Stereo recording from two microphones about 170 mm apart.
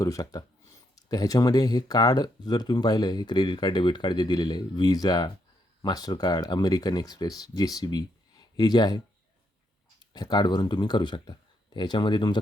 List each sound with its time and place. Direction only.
0.0 s speech: 20° left (ahead or behind)
10.0 s speech: 25° left (ahead or behind)